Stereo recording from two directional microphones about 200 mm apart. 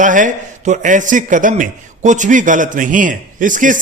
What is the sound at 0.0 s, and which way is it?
A man's voice, 40° right (ahead or behind).